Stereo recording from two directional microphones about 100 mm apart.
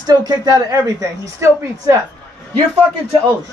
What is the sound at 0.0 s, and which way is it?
Speech, 45° right (ahead or behind).